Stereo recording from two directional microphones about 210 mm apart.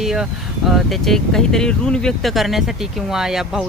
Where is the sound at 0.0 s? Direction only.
Centre (ahead or behind).